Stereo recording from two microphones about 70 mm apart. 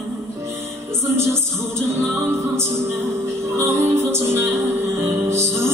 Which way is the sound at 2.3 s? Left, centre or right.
Right.